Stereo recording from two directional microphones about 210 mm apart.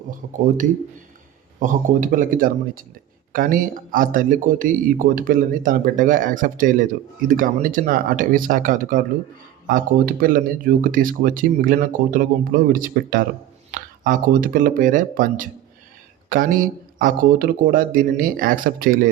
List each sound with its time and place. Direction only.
0.4 s speech: 40° right (ahead or behind)